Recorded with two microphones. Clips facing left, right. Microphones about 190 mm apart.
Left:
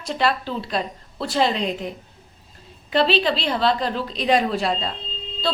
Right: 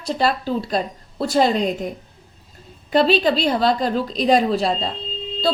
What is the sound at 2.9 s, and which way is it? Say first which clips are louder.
A woman's voice: right 3 dB; 45° right (ahead or behind).